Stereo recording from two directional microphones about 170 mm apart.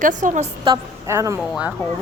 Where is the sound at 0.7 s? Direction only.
35° right (ahead or behind).